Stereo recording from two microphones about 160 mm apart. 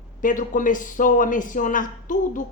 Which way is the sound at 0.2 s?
55° left (ahead or behind).